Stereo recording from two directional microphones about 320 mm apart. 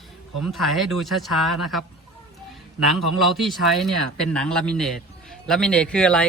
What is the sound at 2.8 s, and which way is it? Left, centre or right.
A man's voice, centre.